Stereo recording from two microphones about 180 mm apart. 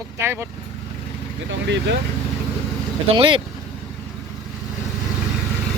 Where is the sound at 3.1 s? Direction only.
30° right (ahead or behind).